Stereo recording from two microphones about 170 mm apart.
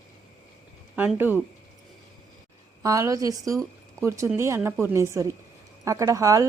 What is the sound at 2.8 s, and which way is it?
A woman's voice, 20° right (ahead or behind).